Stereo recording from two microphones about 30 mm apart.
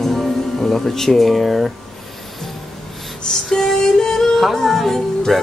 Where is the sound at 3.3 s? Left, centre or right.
Centre.